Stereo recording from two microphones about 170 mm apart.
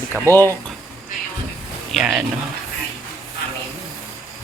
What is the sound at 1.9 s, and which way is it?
Speech, 5° right (ahead or behind).